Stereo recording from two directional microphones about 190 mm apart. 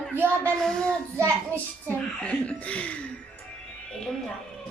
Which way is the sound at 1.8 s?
5° left (ahead or behind).